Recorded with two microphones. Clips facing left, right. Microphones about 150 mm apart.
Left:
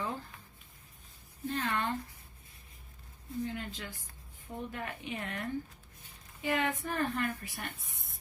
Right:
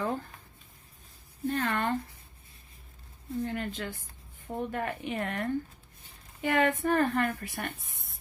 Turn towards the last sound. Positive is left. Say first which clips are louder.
# right 5 dB
turn(degrees=-60)  # may be behind; listen again after turning